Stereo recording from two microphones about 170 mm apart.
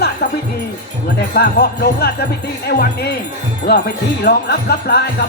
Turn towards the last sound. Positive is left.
turn(degrees=70)  # may be behind; listen again after turning